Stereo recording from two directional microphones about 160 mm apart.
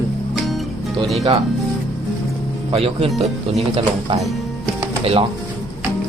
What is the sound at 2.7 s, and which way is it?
Speech, 40° right (ahead or behind).